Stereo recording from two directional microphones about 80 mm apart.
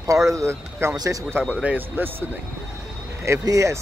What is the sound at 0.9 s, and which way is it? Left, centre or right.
Speech, right.